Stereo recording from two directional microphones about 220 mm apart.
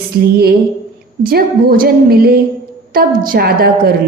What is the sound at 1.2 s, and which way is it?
A woman's voice, 40° right (ahead or behind).